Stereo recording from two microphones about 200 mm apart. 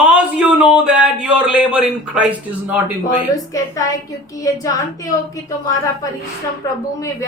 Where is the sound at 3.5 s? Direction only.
15° left (ahead or behind).